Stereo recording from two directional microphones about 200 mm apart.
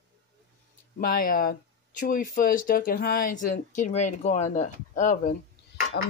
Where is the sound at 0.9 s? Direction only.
45° left (ahead or behind).